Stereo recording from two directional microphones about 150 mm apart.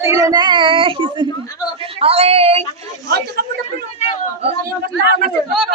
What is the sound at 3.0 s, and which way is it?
Speech, 90° right.